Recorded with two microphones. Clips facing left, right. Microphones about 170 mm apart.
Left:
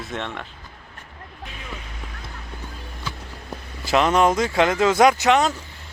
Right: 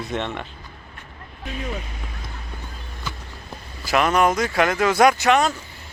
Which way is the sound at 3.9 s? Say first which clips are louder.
Left 1 dB; 25° left (ahead or behind).